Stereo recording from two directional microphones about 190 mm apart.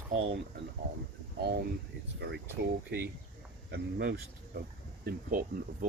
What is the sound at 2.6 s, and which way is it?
Speech, 60° right (ahead or behind).